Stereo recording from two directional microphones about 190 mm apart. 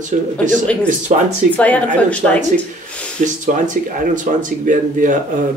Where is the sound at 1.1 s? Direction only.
35° right (ahead or behind).